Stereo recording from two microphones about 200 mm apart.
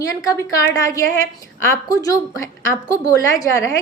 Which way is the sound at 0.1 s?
15° left (ahead or behind).